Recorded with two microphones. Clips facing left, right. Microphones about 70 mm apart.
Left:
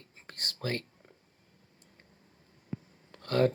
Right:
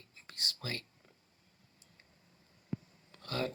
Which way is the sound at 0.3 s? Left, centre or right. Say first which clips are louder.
Left 6 dB; left.